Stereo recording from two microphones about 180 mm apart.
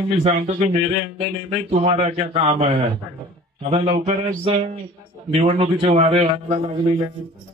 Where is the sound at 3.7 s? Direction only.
35° right (ahead or behind).